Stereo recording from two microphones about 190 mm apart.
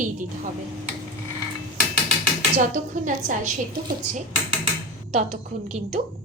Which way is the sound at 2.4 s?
40° right (ahead or behind).